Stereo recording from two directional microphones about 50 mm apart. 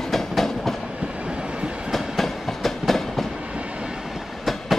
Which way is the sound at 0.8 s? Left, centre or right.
Right.